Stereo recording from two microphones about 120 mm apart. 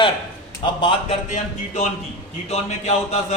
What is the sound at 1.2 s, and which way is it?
Speech, 90° left.